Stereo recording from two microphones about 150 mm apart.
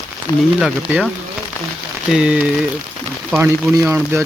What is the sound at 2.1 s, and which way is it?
Speech, 5° right (ahead or behind).